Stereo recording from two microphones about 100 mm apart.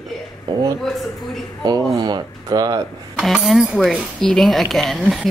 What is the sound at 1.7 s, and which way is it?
Speech, 45° right (ahead or behind).